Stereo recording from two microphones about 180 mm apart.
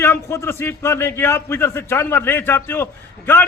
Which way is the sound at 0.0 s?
15° left (ahead or behind).